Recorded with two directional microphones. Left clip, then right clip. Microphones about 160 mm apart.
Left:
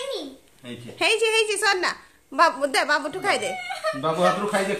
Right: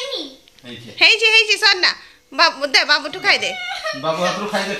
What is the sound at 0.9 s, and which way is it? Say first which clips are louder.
A woman's voice: right 8 dB; 15° left (ahead or behind).